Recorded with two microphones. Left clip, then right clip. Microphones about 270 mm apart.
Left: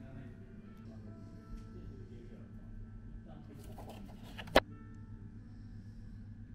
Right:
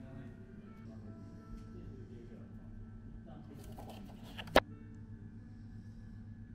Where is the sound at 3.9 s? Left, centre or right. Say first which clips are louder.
Even; centre.